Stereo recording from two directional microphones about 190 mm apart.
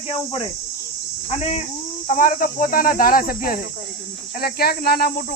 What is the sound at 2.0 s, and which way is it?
Speech, 40° left (ahead or behind).